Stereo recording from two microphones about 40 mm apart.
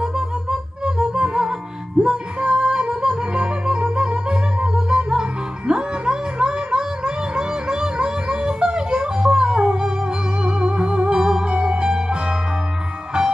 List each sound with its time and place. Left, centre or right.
0.0 s music: right